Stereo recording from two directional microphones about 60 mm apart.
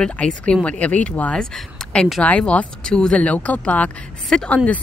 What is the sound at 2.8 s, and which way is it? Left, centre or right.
Speech, centre.